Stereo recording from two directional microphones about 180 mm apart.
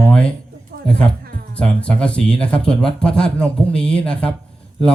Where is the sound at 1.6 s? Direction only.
5° left (ahead or behind).